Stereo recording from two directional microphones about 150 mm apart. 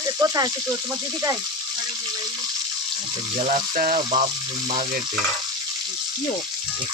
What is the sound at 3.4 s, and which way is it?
Speech, 65° right (ahead or behind).